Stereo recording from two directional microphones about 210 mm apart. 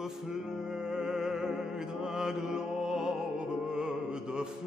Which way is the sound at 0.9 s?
5° right (ahead or behind).